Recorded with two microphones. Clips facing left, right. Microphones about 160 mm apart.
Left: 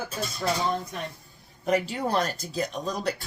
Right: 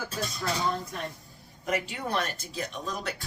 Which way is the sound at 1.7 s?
35° left (ahead or behind).